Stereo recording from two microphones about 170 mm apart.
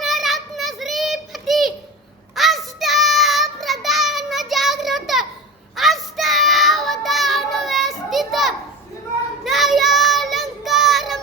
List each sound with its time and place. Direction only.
0.0 s child singing: centre (ahead or behind)